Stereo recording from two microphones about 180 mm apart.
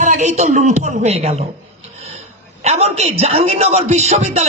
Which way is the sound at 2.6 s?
35° right (ahead or behind).